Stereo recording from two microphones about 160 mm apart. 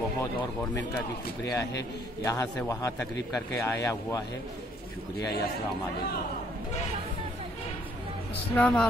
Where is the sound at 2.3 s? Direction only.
20° left (ahead or behind).